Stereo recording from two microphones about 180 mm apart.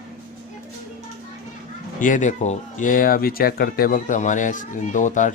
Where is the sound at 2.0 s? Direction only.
45° left (ahead or behind).